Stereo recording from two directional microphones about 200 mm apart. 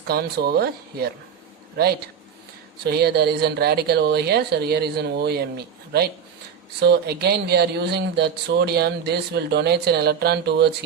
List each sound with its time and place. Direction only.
0.1 s a man's voice: 50° right (ahead or behind)